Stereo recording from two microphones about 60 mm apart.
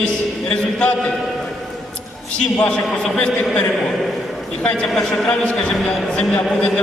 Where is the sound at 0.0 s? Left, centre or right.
Centre.